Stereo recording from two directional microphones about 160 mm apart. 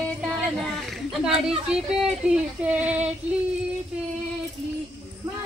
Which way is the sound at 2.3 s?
5° right (ahead or behind).